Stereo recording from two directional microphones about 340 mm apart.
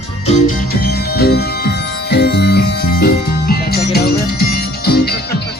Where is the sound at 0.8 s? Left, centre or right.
Left.